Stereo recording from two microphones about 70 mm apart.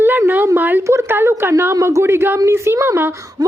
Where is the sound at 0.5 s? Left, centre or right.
Right.